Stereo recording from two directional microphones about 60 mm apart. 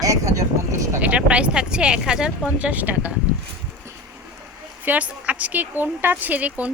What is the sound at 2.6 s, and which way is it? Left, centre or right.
Speech, right.